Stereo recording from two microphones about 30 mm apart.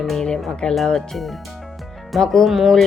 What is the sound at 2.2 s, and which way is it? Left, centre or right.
Speech, centre.